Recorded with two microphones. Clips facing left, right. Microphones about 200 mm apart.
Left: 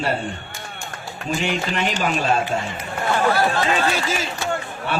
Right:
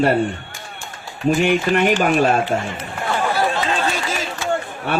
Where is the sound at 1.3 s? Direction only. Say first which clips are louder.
Right 7 dB; 55° right (ahead or behind).